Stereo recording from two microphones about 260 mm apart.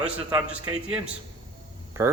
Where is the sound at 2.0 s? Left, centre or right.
Centre.